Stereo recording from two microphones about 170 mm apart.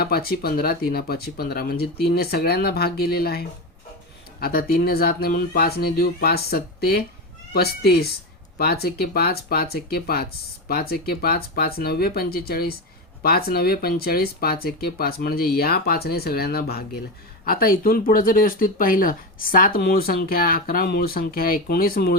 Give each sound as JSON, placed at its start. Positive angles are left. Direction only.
{"t": 0.0, "sound": "speech", "side_deg": 65}